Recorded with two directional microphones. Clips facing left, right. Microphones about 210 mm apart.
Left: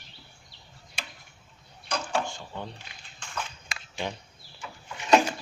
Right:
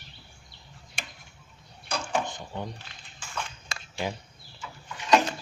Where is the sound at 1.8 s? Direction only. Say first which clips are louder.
Even; 10° right (ahead or behind).